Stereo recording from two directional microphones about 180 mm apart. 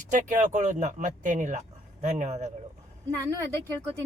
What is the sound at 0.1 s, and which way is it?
Speech, 45° right (ahead or behind).